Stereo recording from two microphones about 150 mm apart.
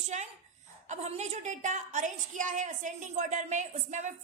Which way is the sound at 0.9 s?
50° right (ahead or behind).